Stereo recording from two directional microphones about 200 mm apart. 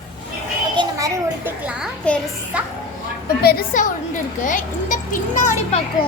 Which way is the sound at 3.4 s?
45° left (ahead or behind).